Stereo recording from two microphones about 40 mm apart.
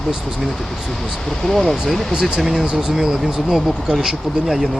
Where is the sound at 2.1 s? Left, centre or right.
Centre.